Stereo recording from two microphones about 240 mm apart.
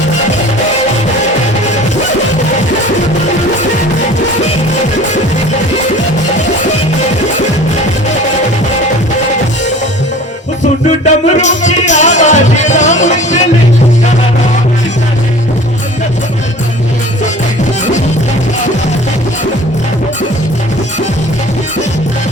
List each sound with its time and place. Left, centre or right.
11.0 s music: left